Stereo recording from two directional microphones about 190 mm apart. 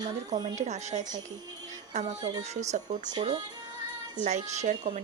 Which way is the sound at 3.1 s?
25° right (ahead or behind).